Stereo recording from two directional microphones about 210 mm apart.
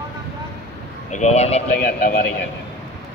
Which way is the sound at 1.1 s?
35° left (ahead or behind).